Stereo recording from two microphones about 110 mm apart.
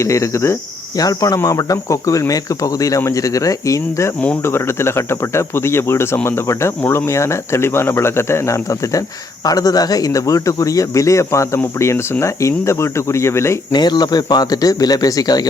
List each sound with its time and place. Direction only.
0.0 s speech: 25° left (ahead or behind)
13.7 s speech: 40° left (ahead or behind)